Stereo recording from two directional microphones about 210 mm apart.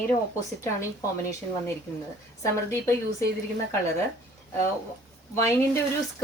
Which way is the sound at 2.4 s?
15° left (ahead or behind).